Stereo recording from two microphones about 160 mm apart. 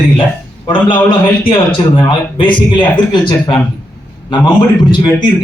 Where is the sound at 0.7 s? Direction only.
30° left (ahead or behind).